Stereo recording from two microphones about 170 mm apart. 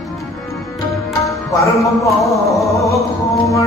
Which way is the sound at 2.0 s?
20° left (ahead or behind).